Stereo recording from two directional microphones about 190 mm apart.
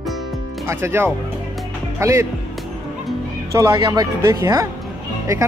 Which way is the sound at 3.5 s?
20° right (ahead or behind).